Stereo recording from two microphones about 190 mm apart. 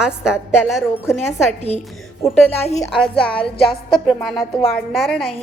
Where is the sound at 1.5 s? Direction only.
35° left (ahead or behind).